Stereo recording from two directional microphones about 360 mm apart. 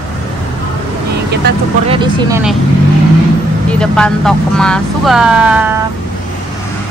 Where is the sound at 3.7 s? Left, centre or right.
Centre.